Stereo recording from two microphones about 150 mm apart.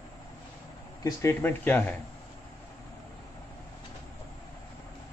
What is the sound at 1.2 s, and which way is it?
Speech, 15° left (ahead or behind).